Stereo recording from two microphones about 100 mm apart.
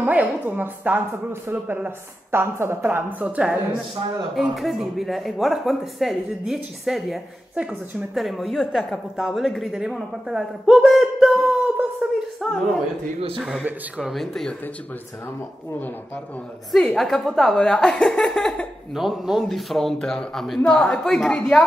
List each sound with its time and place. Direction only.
0.0 s a woman's voice: 15° right (ahead or behind)
4.4 s a woman's voice: centre (ahead or behind)
12.4 s a woman's voice: centre (ahead or behind)
16.7 s a woman's voice: 5° left (ahead or behind)